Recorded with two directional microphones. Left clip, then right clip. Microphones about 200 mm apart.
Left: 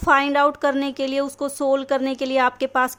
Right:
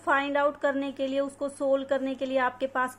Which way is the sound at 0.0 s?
40° left (ahead or behind).